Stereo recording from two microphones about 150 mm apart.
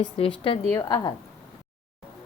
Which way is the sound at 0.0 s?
40° left (ahead or behind).